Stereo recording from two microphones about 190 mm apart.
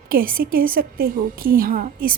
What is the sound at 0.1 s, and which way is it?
A woman's voice, 50° right (ahead or behind).